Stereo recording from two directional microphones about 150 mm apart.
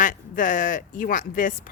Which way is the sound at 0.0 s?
60° left (ahead or behind).